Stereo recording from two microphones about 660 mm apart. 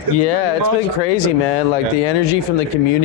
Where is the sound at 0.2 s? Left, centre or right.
Left.